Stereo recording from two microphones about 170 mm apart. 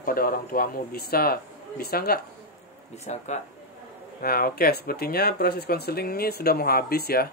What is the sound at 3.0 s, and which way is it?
Speech, 40° left (ahead or behind).